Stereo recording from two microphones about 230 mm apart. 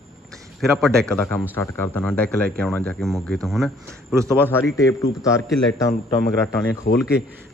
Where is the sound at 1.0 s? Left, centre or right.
Centre.